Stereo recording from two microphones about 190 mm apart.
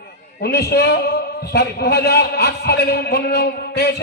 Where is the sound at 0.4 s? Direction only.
60° left (ahead or behind).